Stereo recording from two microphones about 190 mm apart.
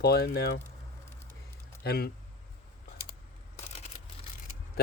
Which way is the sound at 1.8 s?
55° left (ahead or behind).